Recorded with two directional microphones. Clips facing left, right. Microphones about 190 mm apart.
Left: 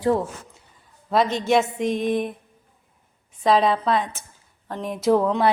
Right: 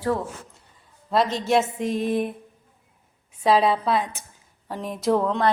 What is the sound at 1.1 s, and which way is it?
A woman's voice, centre (ahead or behind).